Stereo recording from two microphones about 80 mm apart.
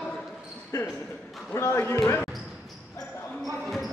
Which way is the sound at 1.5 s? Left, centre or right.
Left.